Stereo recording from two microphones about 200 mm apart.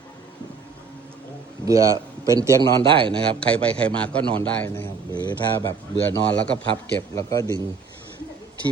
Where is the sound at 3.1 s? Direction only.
5° left (ahead or behind).